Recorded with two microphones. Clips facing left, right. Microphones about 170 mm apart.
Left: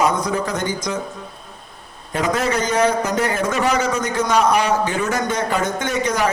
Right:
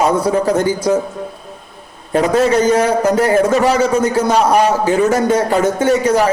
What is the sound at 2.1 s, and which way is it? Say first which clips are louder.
A man's voice: right 8 dB; 30° right (ahead or behind).